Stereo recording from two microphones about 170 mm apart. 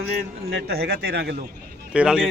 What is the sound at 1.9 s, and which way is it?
Speech, 5° right (ahead or behind).